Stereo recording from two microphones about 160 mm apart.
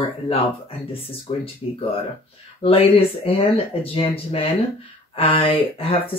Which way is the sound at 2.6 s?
35° left (ahead or behind).